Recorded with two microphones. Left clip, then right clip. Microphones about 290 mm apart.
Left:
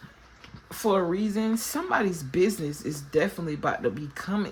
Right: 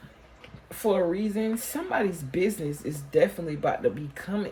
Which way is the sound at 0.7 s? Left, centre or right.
Centre.